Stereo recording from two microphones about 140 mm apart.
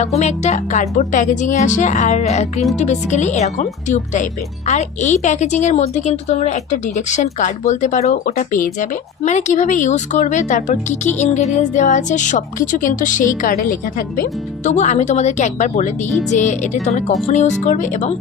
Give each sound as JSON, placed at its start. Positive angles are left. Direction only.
{"t": 0.2, "sound": "speech", "side_deg": 55}
{"t": 14.2, "sound": "speech", "side_deg": 60}